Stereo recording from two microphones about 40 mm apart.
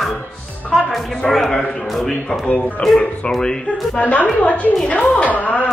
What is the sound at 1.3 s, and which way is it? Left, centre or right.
A man's voice, centre.